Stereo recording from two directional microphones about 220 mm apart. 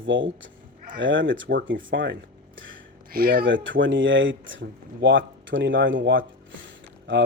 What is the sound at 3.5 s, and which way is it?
Speech, 55° right (ahead or behind).